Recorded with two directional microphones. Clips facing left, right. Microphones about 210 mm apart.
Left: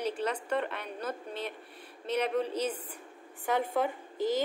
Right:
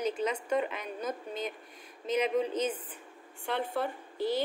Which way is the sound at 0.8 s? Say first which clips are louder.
Right 1 dB; 30° left (ahead or behind).